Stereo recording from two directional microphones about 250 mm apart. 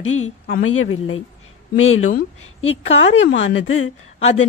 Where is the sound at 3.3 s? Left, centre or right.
Left.